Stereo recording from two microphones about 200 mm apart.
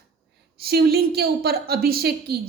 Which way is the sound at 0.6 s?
50° right (ahead or behind).